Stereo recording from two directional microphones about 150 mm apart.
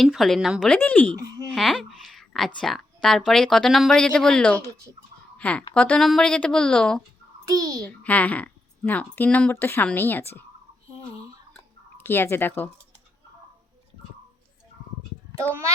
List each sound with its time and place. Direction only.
0.0 s speech: centre (ahead or behind)
0.7 s speech: 10° left (ahead or behind)
1.5 s a sound: centre (ahead or behind)
2.6 s a woman's voice: centre (ahead or behind)
7.4 s a child's voice: 25° right (ahead or behind)
7.9 s speech: 10° left (ahead or behind)
11.5 s a sound: 15° left (ahead or behind)